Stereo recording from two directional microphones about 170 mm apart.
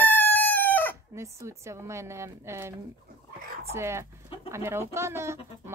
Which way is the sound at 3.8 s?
15° right (ahead or behind).